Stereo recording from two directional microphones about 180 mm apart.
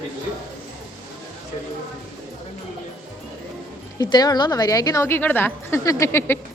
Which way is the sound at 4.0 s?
20° left (ahead or behind).